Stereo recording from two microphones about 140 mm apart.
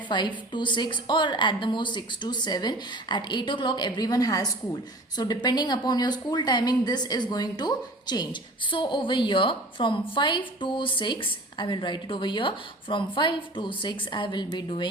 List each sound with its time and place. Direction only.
0.1 s a woman's voice: 35° left (ahead or behind)